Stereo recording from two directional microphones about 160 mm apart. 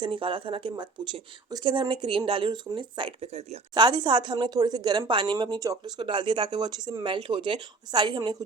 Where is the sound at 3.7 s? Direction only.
25° right (ahead or behind).